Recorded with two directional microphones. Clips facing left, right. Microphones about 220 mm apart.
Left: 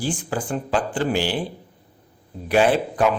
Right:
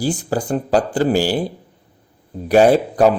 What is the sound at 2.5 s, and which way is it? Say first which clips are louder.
Speech: right 6 dB; 40° right (ahead or behind).